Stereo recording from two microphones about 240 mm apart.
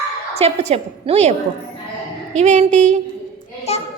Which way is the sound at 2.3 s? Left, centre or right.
Right.